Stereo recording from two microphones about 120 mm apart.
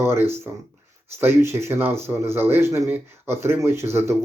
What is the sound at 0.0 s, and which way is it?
Speech, 20° right (ahead or behind).